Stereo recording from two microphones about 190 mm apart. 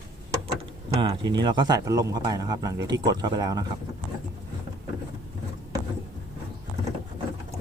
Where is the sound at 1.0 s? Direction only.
25° right (ahead or behind).